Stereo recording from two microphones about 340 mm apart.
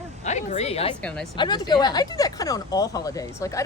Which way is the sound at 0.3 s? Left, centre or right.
Centre.